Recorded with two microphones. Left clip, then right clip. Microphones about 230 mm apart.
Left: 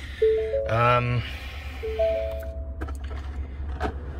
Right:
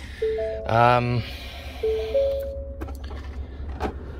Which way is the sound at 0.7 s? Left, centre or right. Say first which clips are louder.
Right 5 dB; centre.